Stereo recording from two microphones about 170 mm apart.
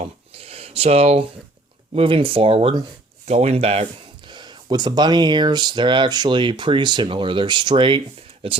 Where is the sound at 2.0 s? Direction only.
30° right (ahead or behind).